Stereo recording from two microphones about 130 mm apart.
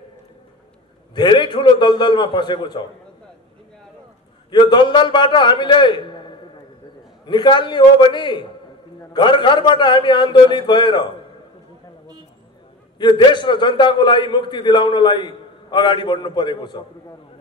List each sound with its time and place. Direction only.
1.1 s a man's voice: 35° left (ahead or behind)
4.5 s a man's voice: 35° left (ahead or behind)
13.0 s a man's voice: 35° left (ahead or behind)